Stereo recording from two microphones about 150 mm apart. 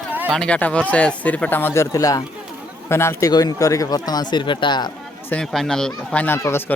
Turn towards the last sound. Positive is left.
turn(degrees=15)  # may be behind; listen again after turning